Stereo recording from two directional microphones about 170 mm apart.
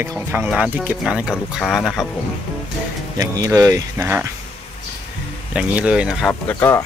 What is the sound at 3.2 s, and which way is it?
Speech, 20° right (ahead or behind).